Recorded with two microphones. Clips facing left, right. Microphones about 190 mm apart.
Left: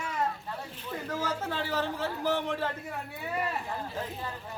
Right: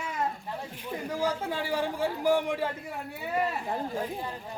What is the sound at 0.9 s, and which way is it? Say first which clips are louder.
Speech: right 3 dB; 15° right (ahead or behind).